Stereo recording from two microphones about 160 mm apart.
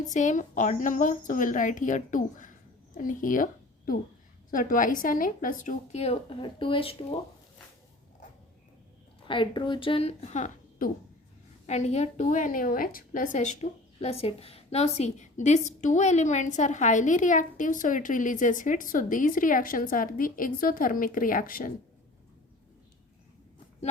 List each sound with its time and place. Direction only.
0.1 s a woman's voice: 50° left (ahead or behind); by 7.2 s 35° left (ahead or behind)
9.2 s speech: 30° left (ahead or behind); by 10.9 s 55° left (ahead or behind)
11.6 s a woman's voice: 45° left (ahead or behind); by 21.7 s 60° left (ahead or behind)